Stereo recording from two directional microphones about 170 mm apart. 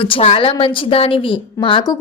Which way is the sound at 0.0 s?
35° left (ahead or behind).